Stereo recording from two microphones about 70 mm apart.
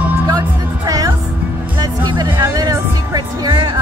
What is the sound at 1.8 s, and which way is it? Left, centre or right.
Music, right.